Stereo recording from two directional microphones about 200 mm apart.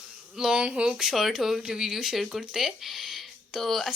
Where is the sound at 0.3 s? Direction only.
5° right (ahead or behind).